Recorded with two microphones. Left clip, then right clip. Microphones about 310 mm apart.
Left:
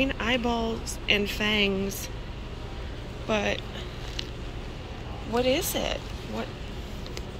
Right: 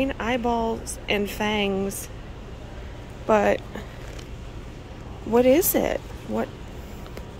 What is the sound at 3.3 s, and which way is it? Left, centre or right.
Speech, centre.